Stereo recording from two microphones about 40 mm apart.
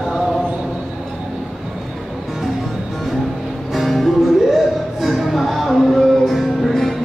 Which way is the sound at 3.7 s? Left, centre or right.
Centre.